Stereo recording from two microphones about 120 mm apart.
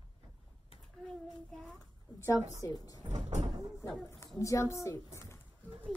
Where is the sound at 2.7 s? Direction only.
30° left (ahead or behind).